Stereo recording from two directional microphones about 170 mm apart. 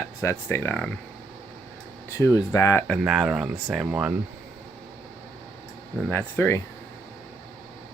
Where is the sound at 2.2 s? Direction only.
20° left (ahead or behind).